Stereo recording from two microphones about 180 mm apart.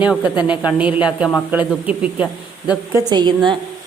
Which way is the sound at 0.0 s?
5° right (ahead or behind).